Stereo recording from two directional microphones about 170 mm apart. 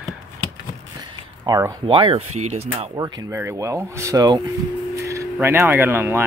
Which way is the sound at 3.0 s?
15° right (ahead or behind).